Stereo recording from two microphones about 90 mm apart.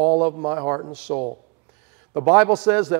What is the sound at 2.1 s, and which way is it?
Speech, 20° right (ahead or behind).